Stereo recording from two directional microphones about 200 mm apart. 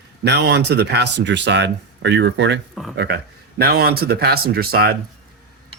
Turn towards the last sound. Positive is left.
turn(degrees=-50)  # may be behind; listen again after turning